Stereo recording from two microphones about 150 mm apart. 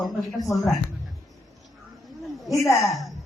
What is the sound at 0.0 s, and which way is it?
Speech, centre (ahead or behind).